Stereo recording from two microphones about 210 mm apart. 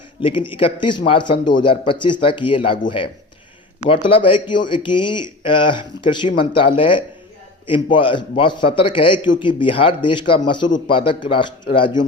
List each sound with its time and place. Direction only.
0.2 s speech: 25° left (ahead or behind)
3.8 s speech: 25° left (ahead or behind)